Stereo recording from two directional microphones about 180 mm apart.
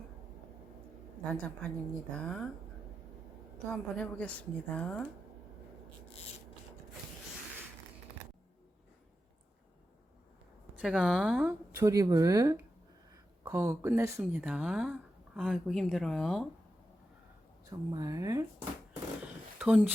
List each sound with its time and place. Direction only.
1.2 s a woman's voice: 5° left (ahead or behind)
3.7 s a woman's voice: 5° left (ahead or behind)
10.8 s speech: 5° left (ahead or behind)
11.9 s speech: 20° right (ahead or behind); by 16.5 s 5° left (ahead or behind)
17.7 s speech: 20° right (ahead or behind)
19.2 s zipper: 5° right (ahead or behind)